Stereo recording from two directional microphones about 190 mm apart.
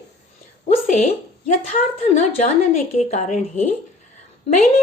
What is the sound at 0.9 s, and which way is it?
A woman's voice, 35° left (ahead or behind).